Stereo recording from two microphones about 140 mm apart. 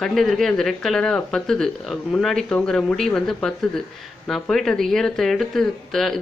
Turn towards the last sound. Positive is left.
turn(degrees=0)  # may be behind; listen again after turning